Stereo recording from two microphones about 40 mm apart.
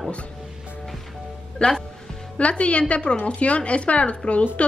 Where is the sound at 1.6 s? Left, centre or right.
Left.